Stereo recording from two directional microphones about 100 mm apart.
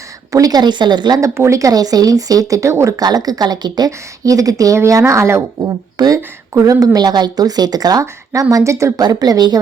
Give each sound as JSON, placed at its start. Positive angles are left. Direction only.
{"t": 0.3, "sound": "speech", "side_deg": -35}
{"t": 1.2, "sound": "speech", "side_deg": -30}
{"t": 6.0, "sound": "speech", "side_deg": -40}
{"t": 9.0, "sound": "speech", "side_deg": -40}